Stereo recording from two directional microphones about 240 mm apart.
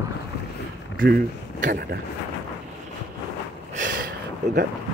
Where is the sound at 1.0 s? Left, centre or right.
Right.